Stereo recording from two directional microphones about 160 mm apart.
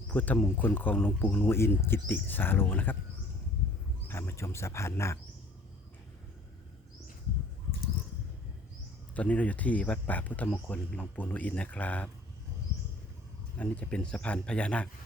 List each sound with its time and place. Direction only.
0.1 s speech: 10° left (ahead or behind)
4.1 s speech: 15° left (ahead or behind)
9.1 s speech: 10° left (ahead or behind)
13.6 s speech: 10° left (ahead or behind)